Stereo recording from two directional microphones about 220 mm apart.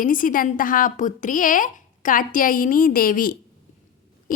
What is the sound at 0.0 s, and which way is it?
A woman's voice, 40° left (ahead or behind).